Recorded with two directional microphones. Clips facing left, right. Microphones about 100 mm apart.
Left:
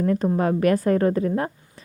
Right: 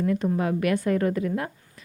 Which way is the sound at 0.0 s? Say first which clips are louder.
Left 3 dB; 40° left (ahead or behind).